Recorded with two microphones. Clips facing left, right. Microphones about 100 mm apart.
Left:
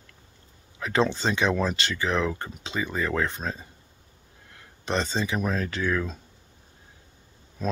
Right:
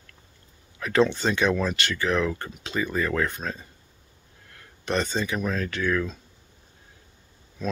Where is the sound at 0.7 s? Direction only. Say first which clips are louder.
Right 3 dB; 20° left (ahead or behind).